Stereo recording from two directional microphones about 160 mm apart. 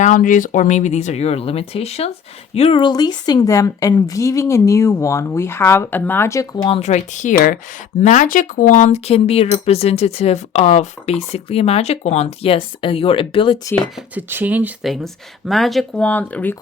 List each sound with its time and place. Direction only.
0.0 s speech: 55° left (ahead or behind); by 6.7 s 20° left (ahead or behind)
6.7 s speech: 40° left (ahead or behind)
14.2 s speech: 10° right (ahead or behind); by 16.6 s 10° left (ahead or behind)